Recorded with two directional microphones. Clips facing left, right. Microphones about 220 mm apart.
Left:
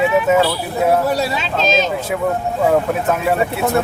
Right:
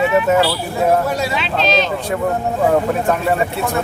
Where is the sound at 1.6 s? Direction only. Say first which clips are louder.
Even; 45° left (ahead or behind).